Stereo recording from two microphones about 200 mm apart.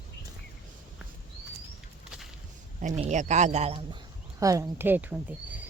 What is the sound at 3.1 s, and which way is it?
Speech, 35° right (ahead or behind).